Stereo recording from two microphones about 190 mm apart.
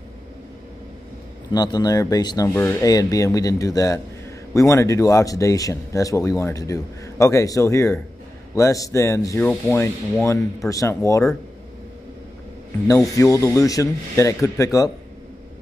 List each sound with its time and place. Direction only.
1.5 s speech: 20° left (ahead or behind)
13.1 s speech: 15° left (ahead or behind)